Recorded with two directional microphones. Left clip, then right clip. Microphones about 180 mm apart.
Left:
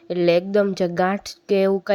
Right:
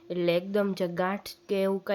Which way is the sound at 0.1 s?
30° left (ahead or behind).